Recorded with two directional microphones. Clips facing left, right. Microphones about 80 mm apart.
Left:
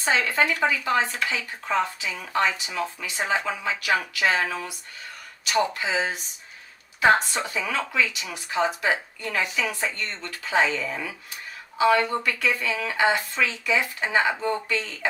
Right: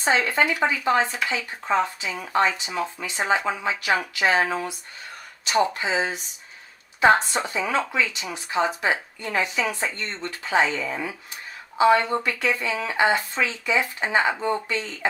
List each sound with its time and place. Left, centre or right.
0.0 s speech: right